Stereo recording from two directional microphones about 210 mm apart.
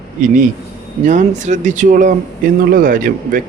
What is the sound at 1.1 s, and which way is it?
Speech, 35° right (ahead or behind).